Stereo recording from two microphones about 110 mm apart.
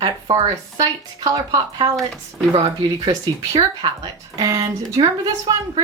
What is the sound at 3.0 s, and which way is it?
Speech, 40° right (ahead or behind).